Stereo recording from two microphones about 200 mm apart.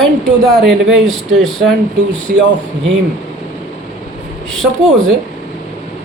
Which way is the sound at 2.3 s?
50° right (ahead or behind).